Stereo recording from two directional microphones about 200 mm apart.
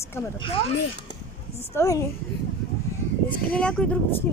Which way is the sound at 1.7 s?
15° left (ahead or behind).